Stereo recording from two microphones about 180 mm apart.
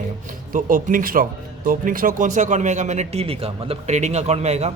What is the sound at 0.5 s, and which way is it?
Speech, 50° right (ahead or behind).